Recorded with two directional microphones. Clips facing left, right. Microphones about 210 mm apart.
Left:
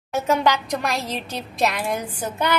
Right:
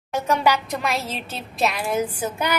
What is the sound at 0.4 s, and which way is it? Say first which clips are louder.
A woman's voice: even; 5° right (ahead or behind).